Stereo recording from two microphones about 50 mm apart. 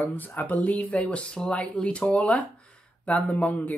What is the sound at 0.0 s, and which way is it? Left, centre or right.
Speech, left.